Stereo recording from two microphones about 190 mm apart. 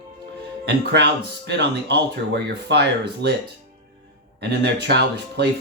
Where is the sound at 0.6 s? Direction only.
65° right (ahead or behind).